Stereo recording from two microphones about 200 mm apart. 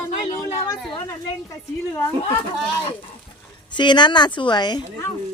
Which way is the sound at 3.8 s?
25° left (ahead or behind).